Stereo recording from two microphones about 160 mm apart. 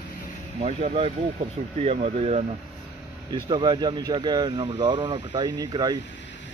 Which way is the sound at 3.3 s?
30° right (ahead or behind).